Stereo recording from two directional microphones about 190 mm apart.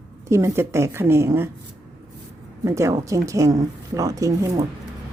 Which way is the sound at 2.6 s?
15° right (ahead or behind).